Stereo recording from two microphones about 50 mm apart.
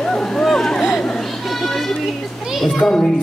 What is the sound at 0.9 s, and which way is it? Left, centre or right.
Music, centre.